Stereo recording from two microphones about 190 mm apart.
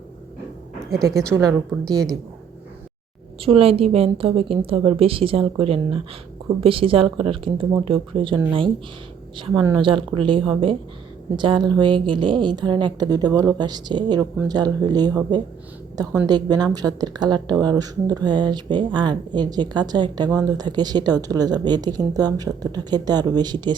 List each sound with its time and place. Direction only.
1.8 s speech: 5° left (ahead or behind)
3.4 s a woman's voice: 30° right (ahead or behind)